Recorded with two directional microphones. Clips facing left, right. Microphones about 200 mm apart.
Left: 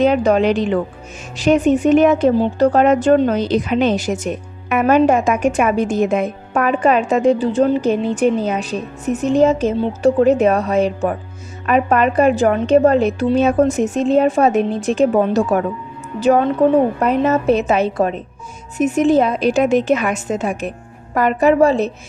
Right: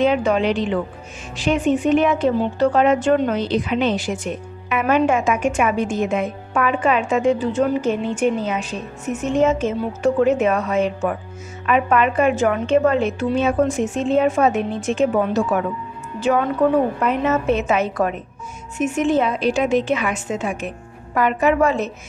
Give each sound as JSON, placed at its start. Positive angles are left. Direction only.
{"t": 0.0, "sound": "speech", "side_deg": 40}